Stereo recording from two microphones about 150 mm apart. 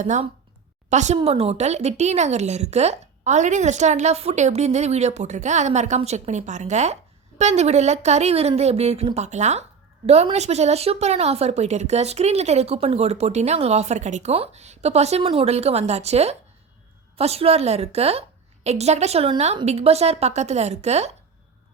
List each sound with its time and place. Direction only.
0.0 s a woman's voice: 55° right (ahead or behind)